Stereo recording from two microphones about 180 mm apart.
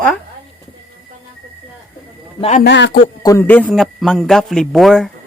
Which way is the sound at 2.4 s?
40° left (ahead or behind).